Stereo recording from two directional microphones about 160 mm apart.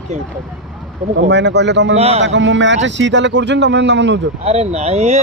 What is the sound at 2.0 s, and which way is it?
Speech, 40° right (ahead or behind).